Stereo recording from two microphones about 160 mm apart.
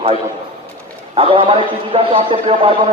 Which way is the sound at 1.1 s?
35° right (ahead or behind).